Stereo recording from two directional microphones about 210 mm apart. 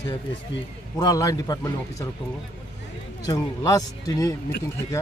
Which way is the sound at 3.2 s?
15° left (ahead or behind).